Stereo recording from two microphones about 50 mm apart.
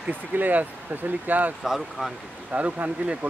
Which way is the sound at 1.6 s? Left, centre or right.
Centre.